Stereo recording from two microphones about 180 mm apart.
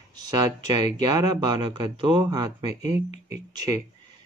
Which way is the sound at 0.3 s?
20° right (ahead or behind).